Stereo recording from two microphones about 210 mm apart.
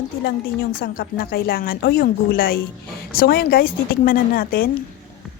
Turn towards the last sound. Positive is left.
turn(degrees=45)  # may be behind; listen again after turning